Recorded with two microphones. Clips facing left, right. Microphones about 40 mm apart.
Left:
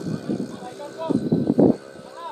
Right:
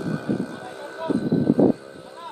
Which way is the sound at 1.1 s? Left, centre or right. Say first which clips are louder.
Even; right.